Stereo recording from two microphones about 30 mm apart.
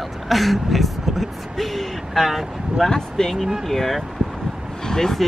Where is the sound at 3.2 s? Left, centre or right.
Left.